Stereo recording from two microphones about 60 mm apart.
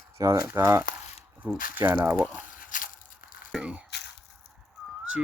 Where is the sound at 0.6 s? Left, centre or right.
Right.